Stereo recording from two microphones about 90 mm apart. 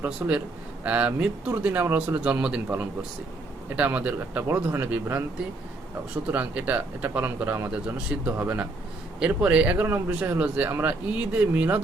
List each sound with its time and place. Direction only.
0.0 s speech: 15° right (ahead or behind)
3.8 s a man's voice: 15° right (ahead or behind)
6.3 s a man's voice: 15° right (ahead or behind)